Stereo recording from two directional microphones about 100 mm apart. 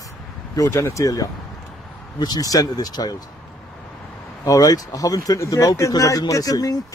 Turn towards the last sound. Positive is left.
turn(degrees=35)  # may be behind; listen again after turning